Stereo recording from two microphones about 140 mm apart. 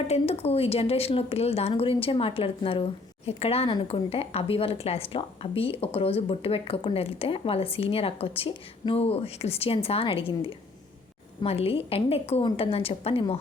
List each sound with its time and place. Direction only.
0.1 s speech: 45° left (ahead or behind)